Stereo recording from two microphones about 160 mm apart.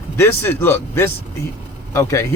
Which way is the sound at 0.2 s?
15° left (ahead or behind).